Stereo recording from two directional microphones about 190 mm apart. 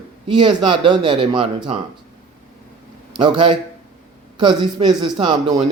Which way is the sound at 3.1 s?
25° right (ahead or behind).